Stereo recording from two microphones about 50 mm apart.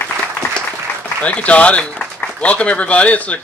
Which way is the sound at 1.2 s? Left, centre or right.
Left.